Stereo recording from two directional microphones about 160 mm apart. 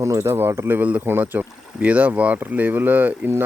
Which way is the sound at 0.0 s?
20° right (ahead or behind).